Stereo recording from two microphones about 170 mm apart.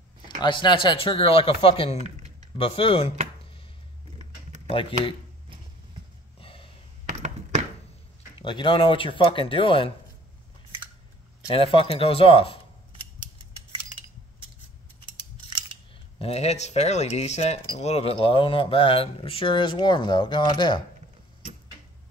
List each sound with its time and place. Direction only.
0.4 s speech: 30° left (ahead or behind)
4.6 s speech: 30° left (ahead or behind)
6.4 s sniff: 30° left (ahead or behind)
7.1 s a sound: 45° right (ahead or behind)
8.4 s speech: 30° left (ahead or behind)
11.5 s speech: 35° left (ahead or behind)
16.2 s speech: 40° left (ahead or behind)